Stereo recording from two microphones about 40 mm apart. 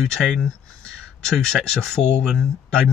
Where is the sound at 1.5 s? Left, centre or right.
Centre.